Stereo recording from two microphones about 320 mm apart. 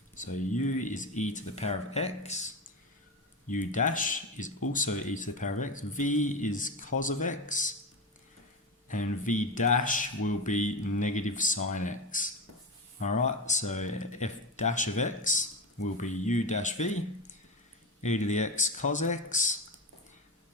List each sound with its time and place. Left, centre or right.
0.5 s speech: left
3.5 s speech: left
8.9 s speech: left
18.0 s speech: left